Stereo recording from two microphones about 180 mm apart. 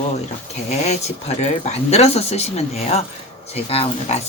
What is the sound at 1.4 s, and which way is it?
Speech, 40° left (ahead or behind).